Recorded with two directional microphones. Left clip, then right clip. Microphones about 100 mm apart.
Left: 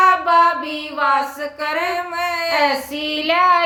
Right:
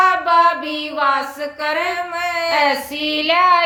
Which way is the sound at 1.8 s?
35° left (ahead or behind).